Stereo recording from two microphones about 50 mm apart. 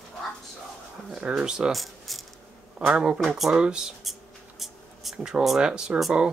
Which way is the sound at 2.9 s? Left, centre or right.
Centre.